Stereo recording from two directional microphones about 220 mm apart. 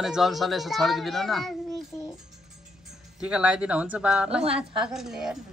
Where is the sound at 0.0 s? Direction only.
Centre (ahead or behind).